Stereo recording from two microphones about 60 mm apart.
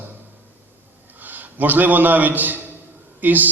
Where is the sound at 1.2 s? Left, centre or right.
Right.